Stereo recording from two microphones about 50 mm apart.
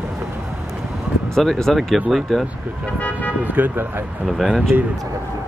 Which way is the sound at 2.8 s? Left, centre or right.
Left.